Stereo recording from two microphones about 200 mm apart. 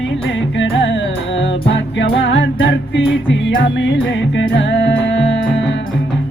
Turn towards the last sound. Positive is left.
turn(degrees=65)  # may be behind; listen again after turning